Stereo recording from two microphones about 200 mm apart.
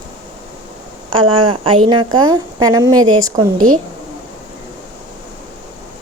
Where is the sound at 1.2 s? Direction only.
25° right (ahead or behind).